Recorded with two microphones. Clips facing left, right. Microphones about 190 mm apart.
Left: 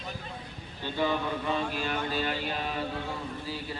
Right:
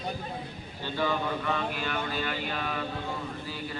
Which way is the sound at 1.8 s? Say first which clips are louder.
Left 1 dB; 35° left (ahead or behind).